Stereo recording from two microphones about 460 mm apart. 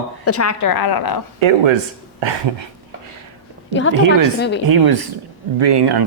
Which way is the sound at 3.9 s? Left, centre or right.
Right.